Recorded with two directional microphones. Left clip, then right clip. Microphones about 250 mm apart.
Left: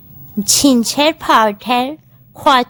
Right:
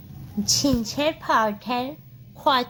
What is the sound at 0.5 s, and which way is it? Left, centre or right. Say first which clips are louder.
Speech: left 10 dB; left.